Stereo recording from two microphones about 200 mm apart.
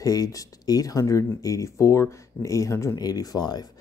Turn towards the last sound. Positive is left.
turn(degrees=20)  # may be behind; listen again after turning